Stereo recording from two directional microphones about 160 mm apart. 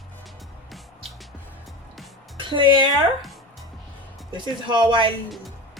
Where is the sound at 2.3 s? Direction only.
30° right (ahead or behind).